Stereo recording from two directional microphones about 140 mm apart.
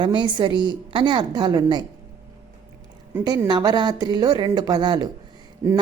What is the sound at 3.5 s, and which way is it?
A woman's voice, 30° right (ahead or behind).